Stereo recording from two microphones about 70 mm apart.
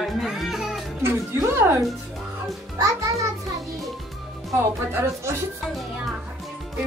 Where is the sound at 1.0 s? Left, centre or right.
Right.